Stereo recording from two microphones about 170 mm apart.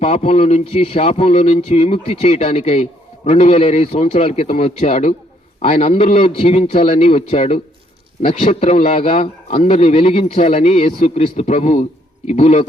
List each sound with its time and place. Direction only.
0.0 s speech: 35° left (ahead or behind)